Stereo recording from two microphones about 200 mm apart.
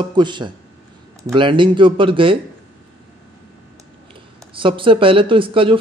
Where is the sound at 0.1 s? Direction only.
25° right (ahead or behind).